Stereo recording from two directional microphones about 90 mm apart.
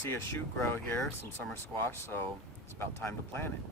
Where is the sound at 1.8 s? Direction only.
25° left (ahead or behind).